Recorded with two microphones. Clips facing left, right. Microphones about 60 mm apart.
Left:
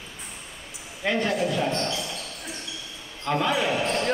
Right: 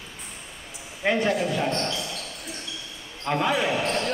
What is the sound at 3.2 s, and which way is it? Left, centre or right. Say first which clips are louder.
Speech: even; centre.